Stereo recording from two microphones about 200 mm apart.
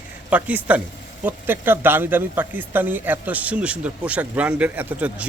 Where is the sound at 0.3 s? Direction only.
5° right (ahead or behind).